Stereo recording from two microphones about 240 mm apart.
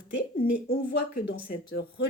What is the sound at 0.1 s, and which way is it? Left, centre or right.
A woman's voice, left.